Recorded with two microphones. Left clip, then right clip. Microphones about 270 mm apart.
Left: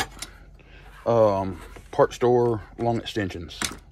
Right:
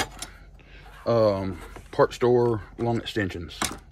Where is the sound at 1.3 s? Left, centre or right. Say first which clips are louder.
Left 3 dB; centre.